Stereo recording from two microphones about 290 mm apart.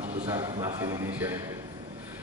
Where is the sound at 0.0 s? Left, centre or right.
Right.